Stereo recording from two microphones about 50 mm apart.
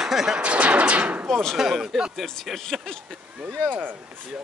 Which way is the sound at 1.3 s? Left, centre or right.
Centre.